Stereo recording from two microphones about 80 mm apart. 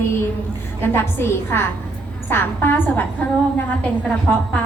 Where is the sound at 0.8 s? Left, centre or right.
Left.